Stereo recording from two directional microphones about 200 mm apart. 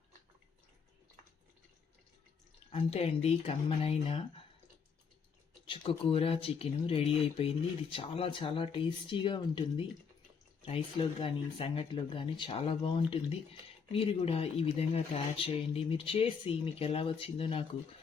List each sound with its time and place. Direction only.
2.7 s speech: 30° left (ahead or behind)
5.6 s speech: 25° left (ahead or behind)